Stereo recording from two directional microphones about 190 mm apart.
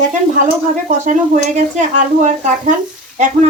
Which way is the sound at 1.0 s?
40° right (ahead or behind).